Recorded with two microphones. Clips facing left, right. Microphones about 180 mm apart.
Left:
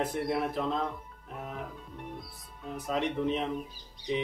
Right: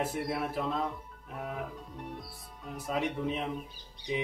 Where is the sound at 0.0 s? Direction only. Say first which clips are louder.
Left 2 dB; 5° right (ahead or behind).